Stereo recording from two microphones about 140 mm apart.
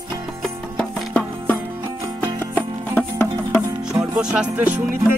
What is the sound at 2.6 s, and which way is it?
Music, 10° left (ahead or behind).